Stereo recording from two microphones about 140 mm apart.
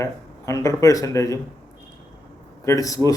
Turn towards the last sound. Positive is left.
turn(degrees=25)  # may be behind; listen again after turning